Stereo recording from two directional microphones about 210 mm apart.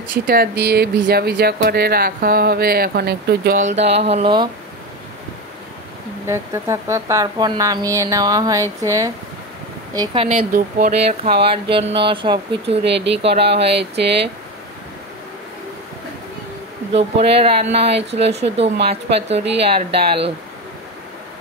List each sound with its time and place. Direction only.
0.1 s speech: 45° right (ahead or behind); by 4.5 s 25° right (ahead or behind)
6.2 s a woman's voice: 15° right (ahead or behind)
9.9 s speech: 25° right (ahead or behind)
10.5 s speech: 40° right (ahead or behind)
11.2 s speech: 25° right (ahead or behind)
12.8 s speech: 55° right (ahead or behind)
13.2 s speech: 30° right (ahead or behind)
13.7 s speech: 55° right (ahead or behind)
16.9 s speech: 30° right (ahead or behind)